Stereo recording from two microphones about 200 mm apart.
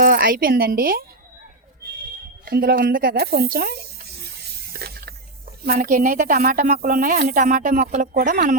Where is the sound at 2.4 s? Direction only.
50° right (ahead or behind).